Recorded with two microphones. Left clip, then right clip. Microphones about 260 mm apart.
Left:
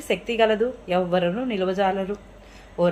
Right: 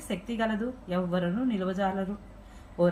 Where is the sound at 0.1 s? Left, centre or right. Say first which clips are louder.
Left 11 dB; left.